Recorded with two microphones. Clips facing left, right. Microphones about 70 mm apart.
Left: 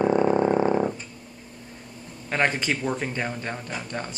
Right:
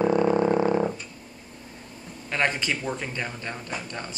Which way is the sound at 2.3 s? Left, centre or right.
Left.